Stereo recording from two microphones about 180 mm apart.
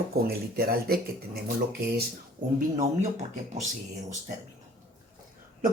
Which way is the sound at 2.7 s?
40° right (ahead or behind).